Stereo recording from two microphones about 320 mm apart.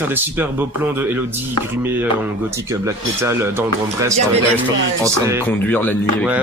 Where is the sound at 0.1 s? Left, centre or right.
Centre.